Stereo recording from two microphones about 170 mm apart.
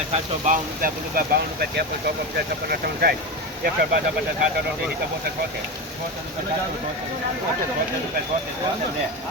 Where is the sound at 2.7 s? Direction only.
65° right (ahead or behind).